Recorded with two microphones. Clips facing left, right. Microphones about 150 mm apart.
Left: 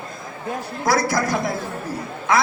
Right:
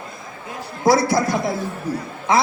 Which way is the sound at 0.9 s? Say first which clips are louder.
Right 4 dB; 25° right (ahead or behind).